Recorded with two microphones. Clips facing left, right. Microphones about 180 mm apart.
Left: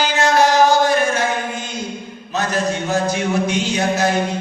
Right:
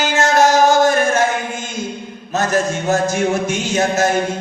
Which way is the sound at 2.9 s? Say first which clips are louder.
Right 5 dB; 45° right (ahead or behind).